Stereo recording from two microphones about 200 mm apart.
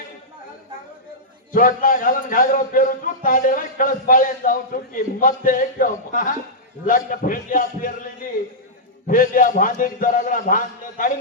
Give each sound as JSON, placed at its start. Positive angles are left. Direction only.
{"t": 1.5, "sound": "a man's voice", "side_deg": 45}
{"t": 9.0, "sound": "a man's voice", "side_deg": 45}